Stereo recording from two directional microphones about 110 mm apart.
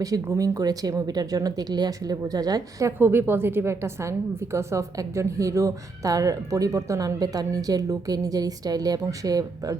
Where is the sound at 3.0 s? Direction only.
20° right (ahead or behind).